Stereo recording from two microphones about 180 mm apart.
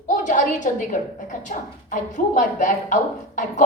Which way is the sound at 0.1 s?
45° left (ahead or behind).